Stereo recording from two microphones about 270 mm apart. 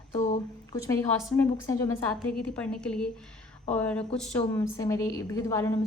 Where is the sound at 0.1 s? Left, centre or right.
Left.